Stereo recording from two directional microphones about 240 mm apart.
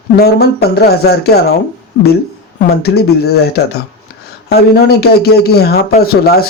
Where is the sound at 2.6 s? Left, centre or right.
Left.